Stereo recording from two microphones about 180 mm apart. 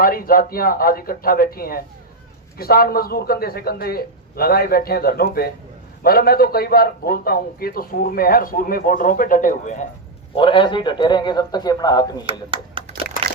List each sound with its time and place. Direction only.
0.0 s a man's voice: 55° left (ahead or behind)
10.3 s a man's voice: 30° left (ahead or behind)
12.2 s speech: 30° right (ahead or behind)